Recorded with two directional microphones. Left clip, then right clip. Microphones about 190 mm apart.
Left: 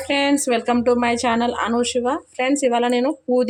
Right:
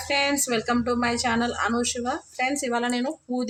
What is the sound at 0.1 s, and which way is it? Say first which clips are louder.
Speech: left 5 dB; 50° left (ahead or behind).